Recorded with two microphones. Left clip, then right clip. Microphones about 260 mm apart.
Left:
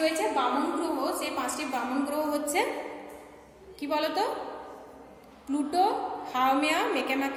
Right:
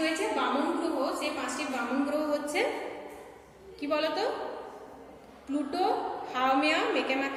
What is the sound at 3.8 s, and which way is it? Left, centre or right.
Speech, left.